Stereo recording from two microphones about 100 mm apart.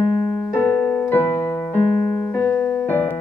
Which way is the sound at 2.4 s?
25° left (ahead or behind).